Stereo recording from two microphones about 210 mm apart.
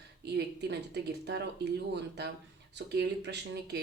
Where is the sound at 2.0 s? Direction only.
55° right (ahead or behind).